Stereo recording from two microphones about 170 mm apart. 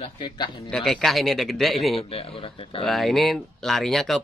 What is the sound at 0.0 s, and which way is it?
Speech, 30° left (ahead or behind).